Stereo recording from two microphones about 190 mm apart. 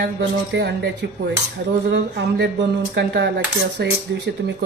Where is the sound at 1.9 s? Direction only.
65° right (ahead or behind).